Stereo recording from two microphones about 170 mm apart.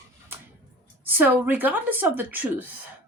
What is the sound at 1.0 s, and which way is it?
Speech, 10° right (ahead or behind).